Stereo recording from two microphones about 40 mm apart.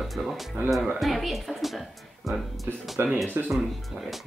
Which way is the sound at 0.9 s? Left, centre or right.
Centre.